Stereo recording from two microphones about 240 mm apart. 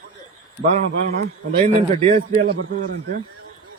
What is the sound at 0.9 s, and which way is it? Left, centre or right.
Speech, right.